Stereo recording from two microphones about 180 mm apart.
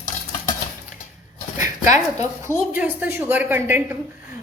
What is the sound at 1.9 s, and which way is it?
A woman's voice, 20° right (ahead or behind).